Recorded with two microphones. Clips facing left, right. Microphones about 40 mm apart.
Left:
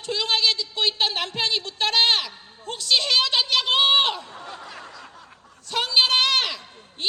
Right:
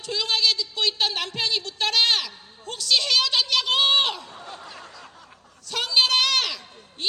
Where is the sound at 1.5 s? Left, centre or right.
Centre.